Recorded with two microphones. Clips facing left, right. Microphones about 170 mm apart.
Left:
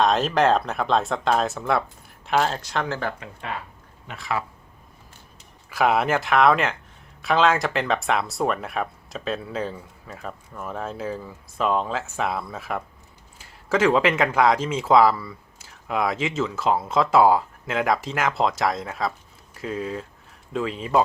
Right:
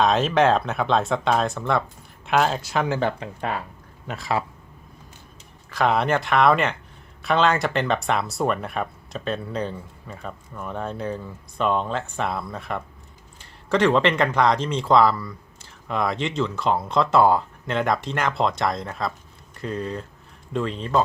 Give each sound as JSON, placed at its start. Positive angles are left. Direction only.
{"t": 0.0, "sound": "speech", "side_deg": 0}
{"t": 3.2, "sound": "speech", "side_deg": -35}
{"t": 5.7, "sound": "speech", "side_deg": 5}